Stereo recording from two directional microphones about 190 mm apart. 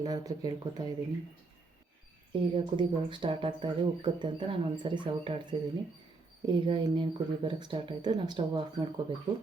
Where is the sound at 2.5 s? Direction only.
25° right (ahead or behind).